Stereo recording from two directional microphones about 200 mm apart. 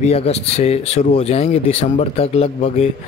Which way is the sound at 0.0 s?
30° left (ahead or behind).